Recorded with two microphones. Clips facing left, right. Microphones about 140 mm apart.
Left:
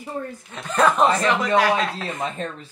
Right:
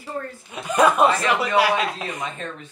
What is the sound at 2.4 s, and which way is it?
Speech, 35° left (ahead or behind).